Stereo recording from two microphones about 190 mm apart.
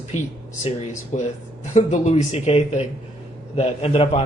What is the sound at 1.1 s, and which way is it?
Speech, 40° left (ahead or behind).